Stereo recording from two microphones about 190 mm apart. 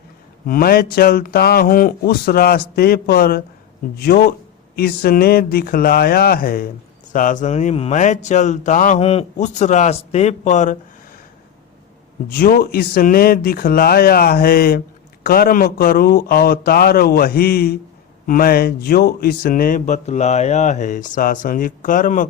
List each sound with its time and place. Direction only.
0.4 s speech: 50° left (ahead or behind)
12.3 s speech: 50° left (ahead or behind)